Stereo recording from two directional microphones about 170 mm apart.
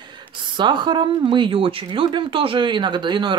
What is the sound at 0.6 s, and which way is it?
Speech, 25° right (ahead or behind).